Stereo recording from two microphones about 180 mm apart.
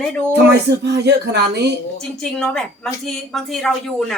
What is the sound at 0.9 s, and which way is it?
Speech, 70° right (ahead or behind).